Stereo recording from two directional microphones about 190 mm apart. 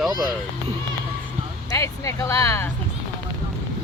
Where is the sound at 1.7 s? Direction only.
15° left (ahead or behind).